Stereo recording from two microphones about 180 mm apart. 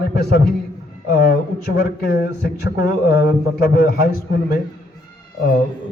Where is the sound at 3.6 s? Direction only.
55° left (ahead or behind).